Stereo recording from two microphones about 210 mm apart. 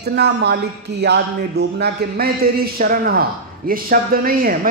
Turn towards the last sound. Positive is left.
turn(degrees=-45)  # may be behind; listen again after turning